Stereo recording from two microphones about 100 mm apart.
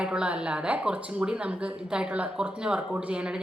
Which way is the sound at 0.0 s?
10° right (ahead or behind).